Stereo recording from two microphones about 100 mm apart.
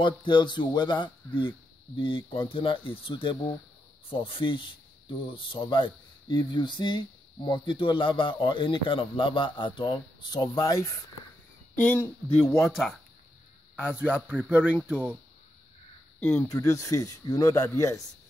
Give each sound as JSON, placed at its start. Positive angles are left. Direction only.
{"t": 0.0, "sound": "speech", "side_deg": 50}
{"t": 11.8, "sound": "speech", "side_deg": 20}
{"t": 13.7, "sound": "a man's voice", "side_deg": -10}
{"t": 16.2, "sound": "speech", "side_deg": 20}
{"t": 16.4, "sound": "speech", "side_deg": 35}